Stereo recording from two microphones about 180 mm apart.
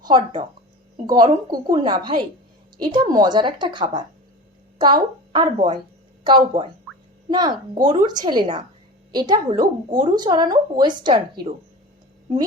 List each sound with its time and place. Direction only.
1.0 s a woman's voice: 20° right (ahead or behind)